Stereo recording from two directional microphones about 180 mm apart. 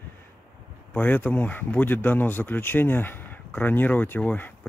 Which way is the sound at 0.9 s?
10° left (ahead or behind).